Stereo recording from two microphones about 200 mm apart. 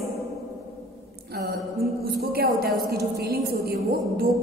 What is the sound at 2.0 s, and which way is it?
A man's voice, 50° right (ahead or behind).